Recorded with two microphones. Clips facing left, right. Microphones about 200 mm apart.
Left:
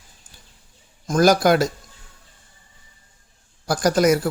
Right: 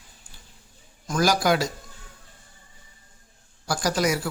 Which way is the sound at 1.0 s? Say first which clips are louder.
Left 6 dB; 50° left (ahead or behind).